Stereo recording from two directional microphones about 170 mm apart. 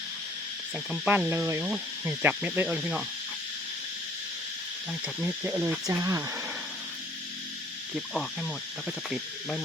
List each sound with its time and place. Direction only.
0.9 s speech: 5° right (ahead or behind)
5.0 s speech: 10° right (ahead or behind)
7.9 s insect: centre (ahead or behind)